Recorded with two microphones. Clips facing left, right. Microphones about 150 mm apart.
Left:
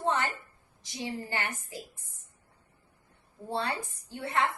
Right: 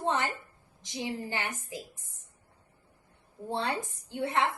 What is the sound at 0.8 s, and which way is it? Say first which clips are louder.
A woman's voice: right 1 dB; 20° right (ahead or behind).